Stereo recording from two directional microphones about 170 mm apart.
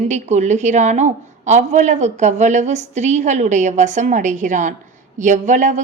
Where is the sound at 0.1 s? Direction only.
45° right (ahead or behind).